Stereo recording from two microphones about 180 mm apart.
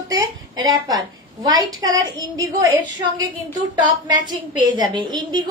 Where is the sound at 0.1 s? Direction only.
20° right (ahead or behind).